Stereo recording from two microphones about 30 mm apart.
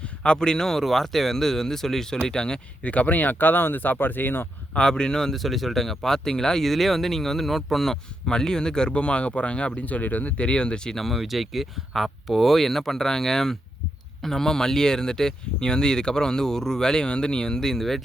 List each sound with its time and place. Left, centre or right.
0.2 s speech: left
0.7 s speech: centre; by 2.6 s left
2.8 s speech: left
4.8 s speech: left
5.3 s speech: centre; by 6.6 s left
6.6 s speech: centre
8.3 s speech: left
8.9 s speech: left
9.8 s speech: left
10.4 s speech: left
11.1 s speech: centre